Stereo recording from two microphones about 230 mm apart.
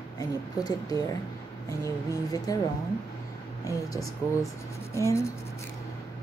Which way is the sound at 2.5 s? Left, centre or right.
Centre.